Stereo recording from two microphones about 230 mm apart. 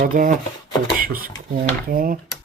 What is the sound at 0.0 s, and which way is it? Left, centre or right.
Speech, right.